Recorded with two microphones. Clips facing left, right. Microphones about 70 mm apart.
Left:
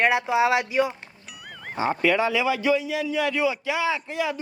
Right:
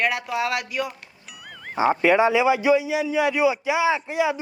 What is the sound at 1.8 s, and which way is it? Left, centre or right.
A man's voice, right.